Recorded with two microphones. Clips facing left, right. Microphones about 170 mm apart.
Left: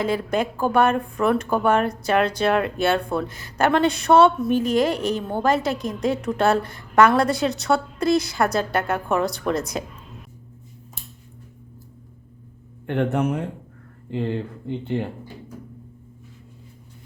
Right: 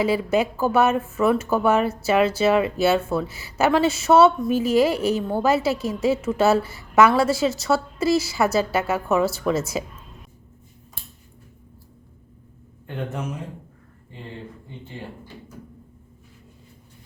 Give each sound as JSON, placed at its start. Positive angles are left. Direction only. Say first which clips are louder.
{"t": 0.0, "sound": "speech", "louder": "right 2 dB", "side_deg": -5}
{"t": 12.9, "sound": "speech", "louder": "left 8 dB", "side_deg": 65}
{"t": 14.1, "sound": "speech", "louder": "left 12 dB", "side_deg": 75}